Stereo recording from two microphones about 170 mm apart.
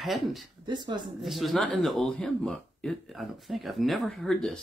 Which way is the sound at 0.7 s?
25° right (ahead or behind).